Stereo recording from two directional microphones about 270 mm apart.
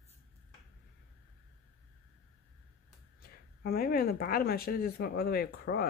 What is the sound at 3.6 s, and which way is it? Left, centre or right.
Speech, left.